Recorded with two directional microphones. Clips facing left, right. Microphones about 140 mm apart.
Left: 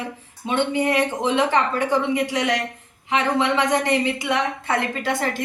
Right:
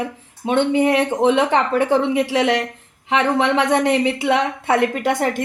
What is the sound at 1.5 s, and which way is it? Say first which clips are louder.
Speech: right 4 dB; 75° right (ahead or behind).